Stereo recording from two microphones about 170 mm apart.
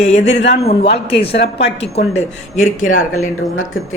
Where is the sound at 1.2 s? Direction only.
75° left (ahead or behind).